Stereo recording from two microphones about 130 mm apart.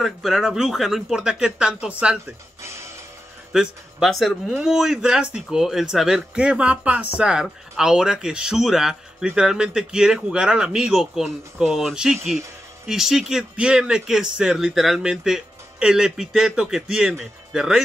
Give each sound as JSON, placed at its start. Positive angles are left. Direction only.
{"t": 0.0, "sound": "speech", "side_deg": 0}
{"t": 2.6, "sound": "music", "side_deg": -20}
{"t": 3.5, "sound": "speech", "side_deg": 0}